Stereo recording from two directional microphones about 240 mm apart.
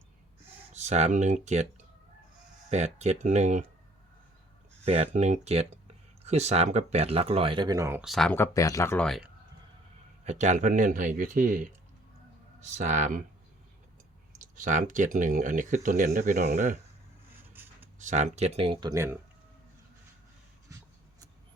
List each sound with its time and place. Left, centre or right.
0.7 s speech: right
2.6 s speech: right
4.9 s speech: right; by 9.3 s centre
10.2 s speech: right
14.3 s speech: right
17.5 s a sound: centre
18.0 s speech: right; by 19.1 s centre